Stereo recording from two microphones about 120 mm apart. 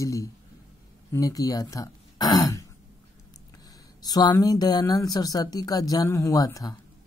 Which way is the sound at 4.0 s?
35° left (ahead or behind).